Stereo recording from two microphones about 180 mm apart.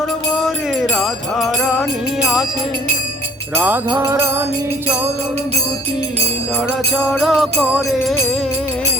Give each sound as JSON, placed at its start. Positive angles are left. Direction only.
{"t": 0.3, "sound": "music", "side_deg": 0}
{"t": 3.5, "sound": "music", "side_deg": -10}
{"t": 7.1, "sound": "music", "side_deg": 0}